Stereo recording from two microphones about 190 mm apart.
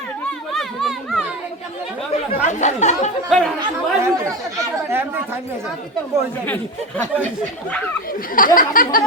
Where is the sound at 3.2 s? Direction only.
Centre (ahead or behind).